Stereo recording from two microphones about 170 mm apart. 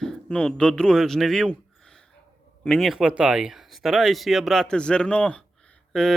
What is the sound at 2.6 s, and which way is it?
Speech, centre (ahead or behind).